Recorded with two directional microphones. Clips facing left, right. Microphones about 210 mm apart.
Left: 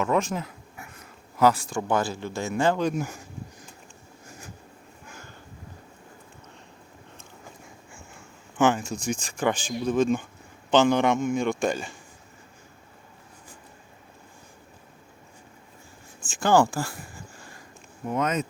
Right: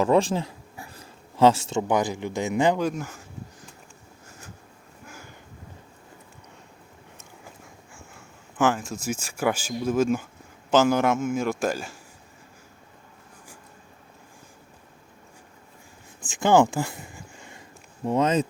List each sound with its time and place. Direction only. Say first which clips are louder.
0.0 s speech: right 4 dB; 30° right (ahead or behind)
2.9 s speech: left 4 dB; 10° left (ahead or behind)
4.3 s vehicle: left 2 dB; 10° left (ahead or behind)
8.5 s a man's voice: left 1 dB; centre (ahead or behind)
16.2 s speech: right 2 dB; 20° right (ahead or behind)
18.0 s speech: right 4 dB; 30° right (ahead or behind)